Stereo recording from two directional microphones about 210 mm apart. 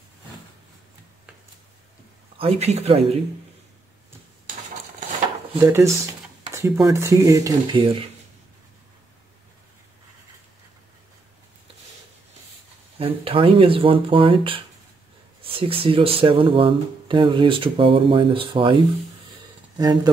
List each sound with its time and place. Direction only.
2.3 s speech: 30° right (ahead or behind)
5.6 s speech: 10° right (ahead or behind)
6.5 s a sound: 10° right (ahead or behind)
6.9 s speech: 15° right (ahead or behind)
13.0 s speech: 25° right (ahead or behind)
19.8 s speech: 20° right (ahead or behind)